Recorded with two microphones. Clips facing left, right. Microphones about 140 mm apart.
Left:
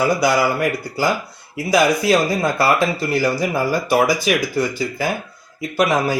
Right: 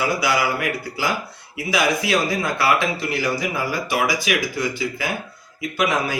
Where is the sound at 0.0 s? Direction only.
45° left (ahead or behind).